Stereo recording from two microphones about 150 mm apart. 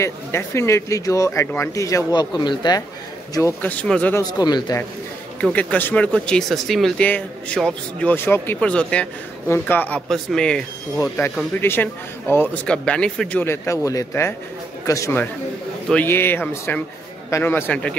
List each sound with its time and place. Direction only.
0.0 s speech: 20° left (ahead or behind)
3.6 s speech: 5° left (ahead or behind)
4.1 s speech: 25° left (ahead or behind)
5.4 s speech: 10° left (ahead or behind)
11.6 s speech: 15° left (ahead or behind)